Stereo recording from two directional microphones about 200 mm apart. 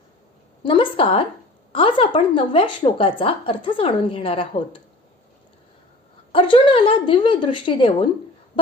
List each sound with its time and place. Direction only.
0.6 s a woman's voice: 25° left (ahead or behind)
6.3 s a woman's voice: 25° left (ahead or behind)